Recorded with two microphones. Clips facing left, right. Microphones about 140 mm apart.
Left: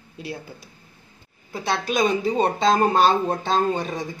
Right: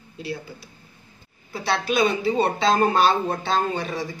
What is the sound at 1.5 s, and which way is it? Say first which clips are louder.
Speech: right 1 dB; 45° left (ahead or behind).